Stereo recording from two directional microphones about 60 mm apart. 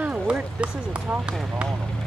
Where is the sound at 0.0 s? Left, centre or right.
Centre.